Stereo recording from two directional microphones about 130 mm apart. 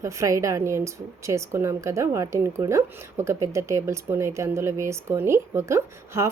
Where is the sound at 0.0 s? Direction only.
25° right (ahead or behind).